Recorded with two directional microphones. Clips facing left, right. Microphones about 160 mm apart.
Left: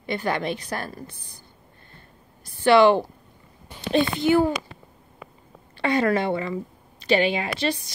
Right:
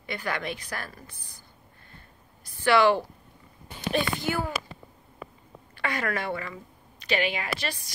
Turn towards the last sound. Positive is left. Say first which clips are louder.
# left 7 dB
turn(degrees=25)  # may be behind; listen again after turning